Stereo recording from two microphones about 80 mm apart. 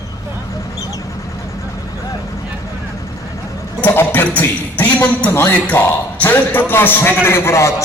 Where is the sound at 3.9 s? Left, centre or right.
Left.